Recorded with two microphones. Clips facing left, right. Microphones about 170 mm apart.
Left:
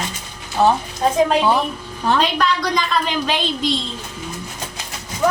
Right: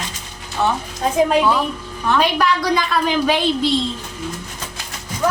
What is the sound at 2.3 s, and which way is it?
Speech, 5° right (ahead or behind).